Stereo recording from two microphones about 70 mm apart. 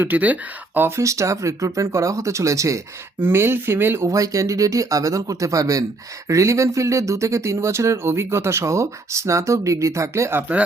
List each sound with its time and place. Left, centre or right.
0.0 s speech: right
0.9 s speech: right
3.2 s speech: right
4.0 s speech: right